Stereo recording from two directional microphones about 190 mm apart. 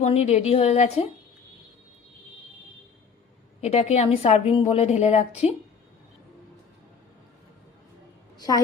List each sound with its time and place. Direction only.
0.0 s a woman's voice: 35° left (ahead or behind)
3.6 s a woman's voice: 35° left (ahead or behind)
8.4 s a woman's voice: 20° left (ahead or behind)